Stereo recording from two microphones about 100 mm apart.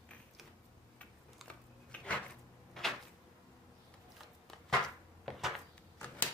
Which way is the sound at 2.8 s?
5° left (ahead or behind).